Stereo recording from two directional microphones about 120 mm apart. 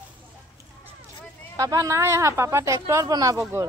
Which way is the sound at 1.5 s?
30° right (ahead or behind).